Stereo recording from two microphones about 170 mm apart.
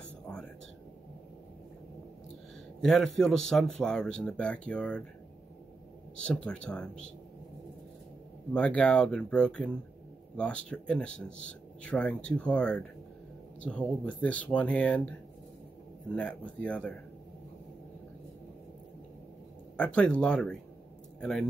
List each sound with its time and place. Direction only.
0.3 s whispering: 5° left (ahead or behind)
2.8 s speech: 5° left (ahead or behind)
6.2 s speech: 5° left (ahead or behind)
8.5 s speech: 5° left (ahead or behind)
19.8 s speech: 5° left (ahead or behind)